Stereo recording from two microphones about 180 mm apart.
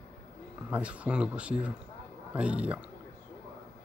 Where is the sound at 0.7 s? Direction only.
5° right (ahead or behind).